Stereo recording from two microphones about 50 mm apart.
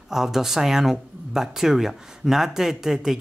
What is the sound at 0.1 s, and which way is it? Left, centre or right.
Speech, centre.